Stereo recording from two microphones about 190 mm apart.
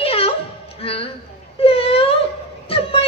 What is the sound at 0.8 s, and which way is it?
A woman's voice, 30° left (ahead or behind).